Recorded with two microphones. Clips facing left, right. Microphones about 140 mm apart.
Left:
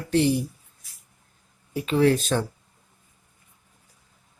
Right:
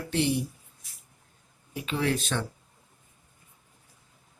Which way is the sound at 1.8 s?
40° left (ahead or behind).